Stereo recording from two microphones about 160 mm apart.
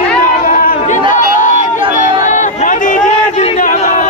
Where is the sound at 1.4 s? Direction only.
55° left (ahead or behind).